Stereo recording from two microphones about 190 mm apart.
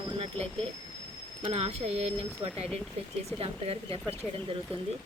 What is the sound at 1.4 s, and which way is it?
Speech, 30° right (ahead or behind).